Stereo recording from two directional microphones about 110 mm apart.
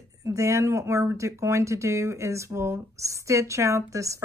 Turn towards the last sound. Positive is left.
turn(degrees=-30)  # may be behind; listen again after turning